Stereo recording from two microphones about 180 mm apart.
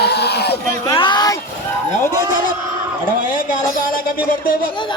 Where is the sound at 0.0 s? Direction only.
65° left (ahead or behind).